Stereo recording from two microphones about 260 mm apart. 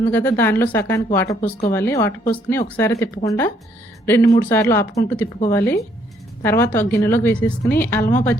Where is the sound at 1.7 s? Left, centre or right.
Centre.